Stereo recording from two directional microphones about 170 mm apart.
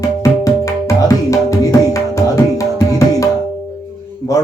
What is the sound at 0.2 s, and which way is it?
Music, 20° left (ahead or behind).